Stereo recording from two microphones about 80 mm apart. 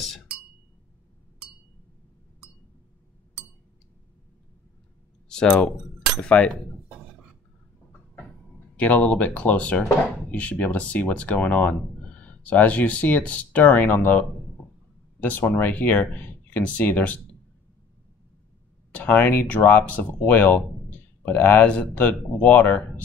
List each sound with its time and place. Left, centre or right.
5.3 s speech: centre
8.7 s speech: centre
18.9 s speech: left